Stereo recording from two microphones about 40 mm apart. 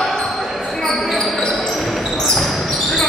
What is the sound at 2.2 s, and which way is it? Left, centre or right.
Basketball bounce, centre.